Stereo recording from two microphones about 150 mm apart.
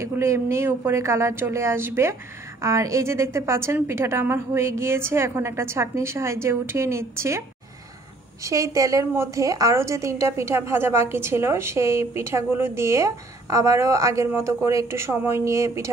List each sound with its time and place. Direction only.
0.0 s a woman's voice: 20° right (ahead or behind)